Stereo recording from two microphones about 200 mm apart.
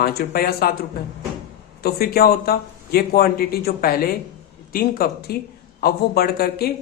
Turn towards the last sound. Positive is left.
turn(degrees=50)  # may be behind; listen again after turning